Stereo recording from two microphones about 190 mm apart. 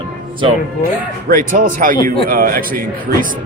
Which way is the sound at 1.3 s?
45° right (ahead or behind).